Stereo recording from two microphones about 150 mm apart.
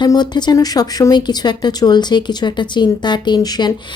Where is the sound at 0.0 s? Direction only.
30° left (ahead or behind).